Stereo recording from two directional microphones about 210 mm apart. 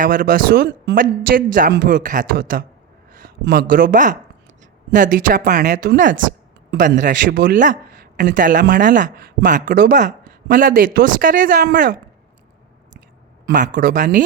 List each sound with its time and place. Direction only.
0.0 s speech: 40° right (ahead or behind)
13.4 s speech: 40° right (ahead or behind)